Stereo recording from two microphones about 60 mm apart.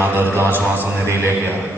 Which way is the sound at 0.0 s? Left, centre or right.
Right.